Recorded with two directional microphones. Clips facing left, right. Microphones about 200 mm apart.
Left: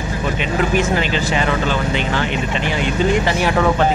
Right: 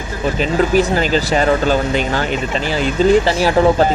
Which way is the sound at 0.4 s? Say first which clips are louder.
Right 5 dB; 35° right (ahead or behind).